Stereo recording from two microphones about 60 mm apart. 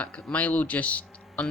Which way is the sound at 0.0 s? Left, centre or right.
Left.